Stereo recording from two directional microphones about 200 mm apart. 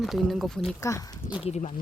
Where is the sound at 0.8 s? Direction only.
15° left (ahead or behind).